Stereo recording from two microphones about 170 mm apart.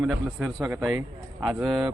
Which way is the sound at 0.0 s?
Centre (ahead or behind).